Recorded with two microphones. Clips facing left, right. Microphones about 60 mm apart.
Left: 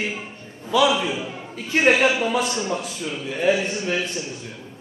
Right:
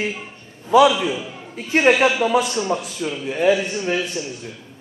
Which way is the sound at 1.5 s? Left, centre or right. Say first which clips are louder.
Right 2 dB; right.